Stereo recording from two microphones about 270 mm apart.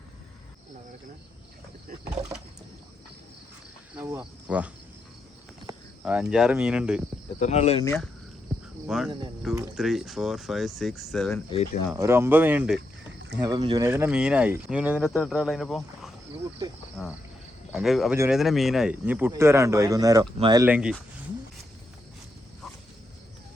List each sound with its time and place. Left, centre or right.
3.9 s speech: centre
7.3 s speech: left
8.9 s speech: centre
11.9 s speech: centre
13.4 s speech: centre
16.6 s speech: centre
17.0 s speech: centre